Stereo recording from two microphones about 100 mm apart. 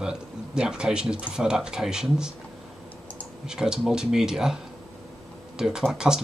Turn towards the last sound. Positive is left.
turn(degrees=-5)  # may be behind; listen again after turning